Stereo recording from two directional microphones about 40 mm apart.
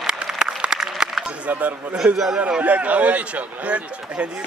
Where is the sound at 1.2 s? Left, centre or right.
Right.